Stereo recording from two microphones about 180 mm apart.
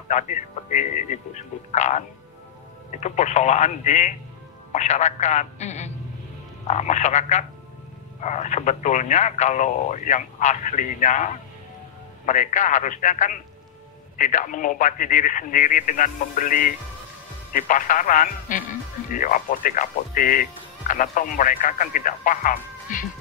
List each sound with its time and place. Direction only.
0.1 s speech: 45° left (ahead or behind)